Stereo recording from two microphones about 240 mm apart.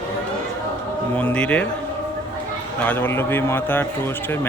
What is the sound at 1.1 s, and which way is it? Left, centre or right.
Speech, centre.